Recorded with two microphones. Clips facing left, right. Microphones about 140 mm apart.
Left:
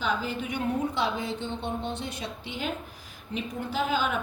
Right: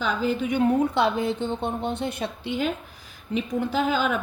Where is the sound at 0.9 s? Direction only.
60° right (ahead or behind).